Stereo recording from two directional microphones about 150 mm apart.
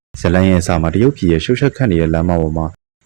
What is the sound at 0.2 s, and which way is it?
Speech, 20° right (ahead or behind).